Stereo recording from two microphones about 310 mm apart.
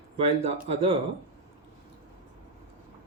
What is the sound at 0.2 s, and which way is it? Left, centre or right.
Speech, centre.